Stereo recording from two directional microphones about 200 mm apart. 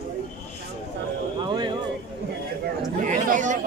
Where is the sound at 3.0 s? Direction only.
40° right (ahead or behind).